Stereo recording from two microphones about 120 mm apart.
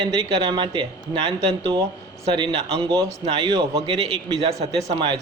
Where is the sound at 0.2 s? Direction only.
50° right (ahead or behind).